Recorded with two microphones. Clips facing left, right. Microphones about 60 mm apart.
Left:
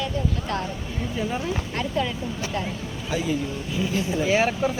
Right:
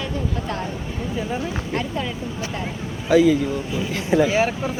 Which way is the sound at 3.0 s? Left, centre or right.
Right.